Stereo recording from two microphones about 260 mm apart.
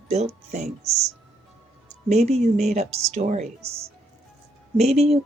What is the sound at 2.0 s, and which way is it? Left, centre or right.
Speech, right.